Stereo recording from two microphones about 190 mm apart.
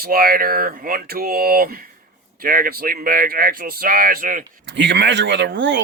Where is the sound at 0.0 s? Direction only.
50° right (ahead or behind).